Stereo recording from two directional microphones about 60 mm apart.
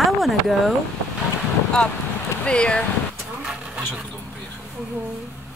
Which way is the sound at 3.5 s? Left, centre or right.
Centre.